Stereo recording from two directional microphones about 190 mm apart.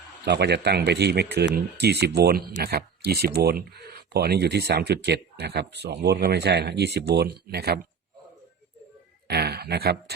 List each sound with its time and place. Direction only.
0.3 s speech: 60° right (ahead or behind)
9.2 s speech: 60° right (ahead or behind)